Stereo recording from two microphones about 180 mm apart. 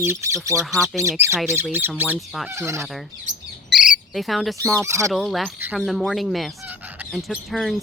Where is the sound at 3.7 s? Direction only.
Centre (ahead or behind).